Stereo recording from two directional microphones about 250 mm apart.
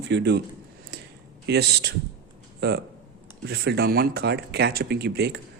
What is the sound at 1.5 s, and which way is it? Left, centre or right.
Speech, right.